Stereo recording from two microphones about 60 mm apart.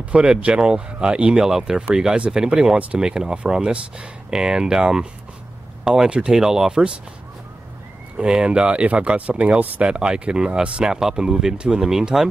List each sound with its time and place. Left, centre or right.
0.1 s speech: centre
8.2 s speech: centre